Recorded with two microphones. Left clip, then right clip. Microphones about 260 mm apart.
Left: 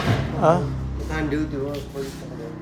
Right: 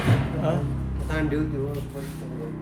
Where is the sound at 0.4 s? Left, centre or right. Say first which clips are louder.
Left 10 dB; centre.